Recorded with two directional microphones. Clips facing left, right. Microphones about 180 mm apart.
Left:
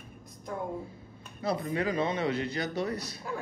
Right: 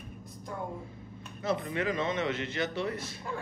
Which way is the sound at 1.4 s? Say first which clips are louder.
Left 1 dB; 35° left (ahead or behind).